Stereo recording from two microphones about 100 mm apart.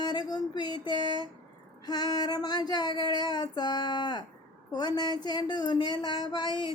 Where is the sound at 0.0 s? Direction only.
45° left (ahead or behind).